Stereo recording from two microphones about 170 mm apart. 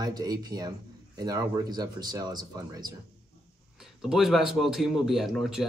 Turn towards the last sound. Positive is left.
turn(degrees=0)  # may be behind; listen again after turning